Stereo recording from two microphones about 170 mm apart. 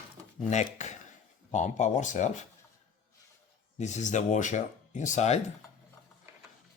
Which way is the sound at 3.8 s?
45° left (ahead or behind).